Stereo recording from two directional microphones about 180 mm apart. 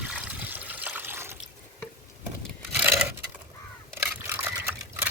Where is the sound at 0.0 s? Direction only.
5° right (ahead or behind).